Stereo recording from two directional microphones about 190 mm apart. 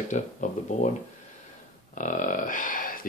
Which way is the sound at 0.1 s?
40° left (ahead or behind).